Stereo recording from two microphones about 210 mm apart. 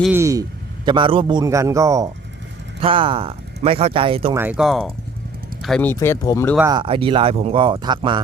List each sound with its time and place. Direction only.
0.1 s a man's voice: 15° right (ahead or behind)
4.4 s speech: 5° right (ahead or behind); by 6.6 s 10° left (ahead or behind)
6.6 s speech: 20° right (ahead or behind)